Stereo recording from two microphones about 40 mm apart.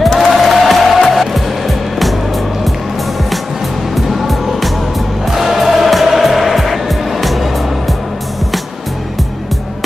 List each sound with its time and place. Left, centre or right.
0.0 s music: centre
3.9 s music: centre